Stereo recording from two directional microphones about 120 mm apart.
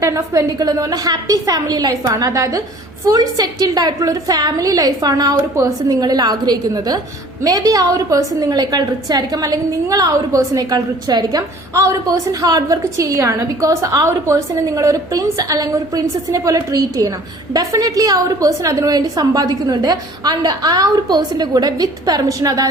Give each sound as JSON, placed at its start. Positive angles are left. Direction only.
{"t": 0.0, "sound": "a woman's voice", "side_deg": -25}